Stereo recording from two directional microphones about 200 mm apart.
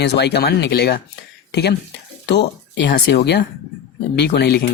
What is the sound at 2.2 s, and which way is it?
Speech, 55° left (ahead or behind).